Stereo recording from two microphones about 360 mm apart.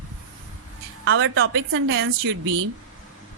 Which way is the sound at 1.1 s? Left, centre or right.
Right.